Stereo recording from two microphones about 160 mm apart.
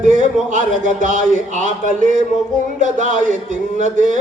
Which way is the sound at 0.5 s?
55° right (ahead or behind).